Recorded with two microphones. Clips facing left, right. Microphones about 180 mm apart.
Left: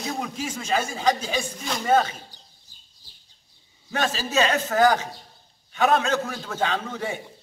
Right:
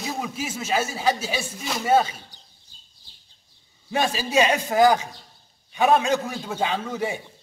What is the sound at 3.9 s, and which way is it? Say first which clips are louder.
A man's voice: right 2 dB; 10° right (ahead or behind).